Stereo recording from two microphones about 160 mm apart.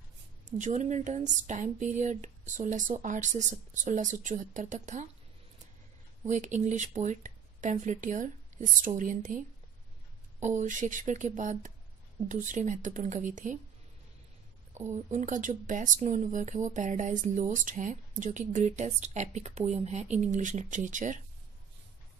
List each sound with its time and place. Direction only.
0.5 s speech: 50° right (ahead or behind)
6.2 s speech: 50° right (ahead or behind)
10.4 s speech: 50° right (ahead or behind)
14.9 s speech: 45° right (ahead or behind)